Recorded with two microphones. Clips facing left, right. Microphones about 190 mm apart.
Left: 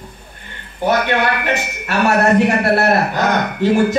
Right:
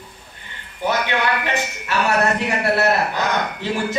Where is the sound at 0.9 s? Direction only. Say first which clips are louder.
Left 5 dB; 55° left (ahead or behind).